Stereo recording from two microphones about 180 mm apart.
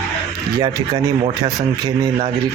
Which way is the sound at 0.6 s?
20° right (ahead or behind).